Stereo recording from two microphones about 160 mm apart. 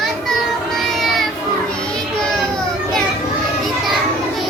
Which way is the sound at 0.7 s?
Centre (ahead or behind).